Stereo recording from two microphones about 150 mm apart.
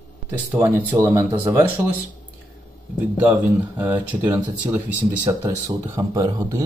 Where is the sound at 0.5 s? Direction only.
15° right (ahead or behind).